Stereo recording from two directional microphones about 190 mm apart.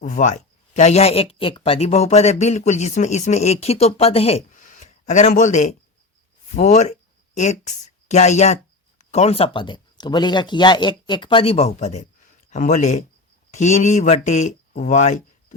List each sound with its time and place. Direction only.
0.0 s speech: 40° left (ahead or behind)
6.6 s a sound: 35° left (ahead or behind)
8.0 s speech: 35° left (ahead or behind)